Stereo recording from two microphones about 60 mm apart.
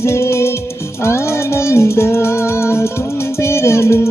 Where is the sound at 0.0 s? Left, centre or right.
Left.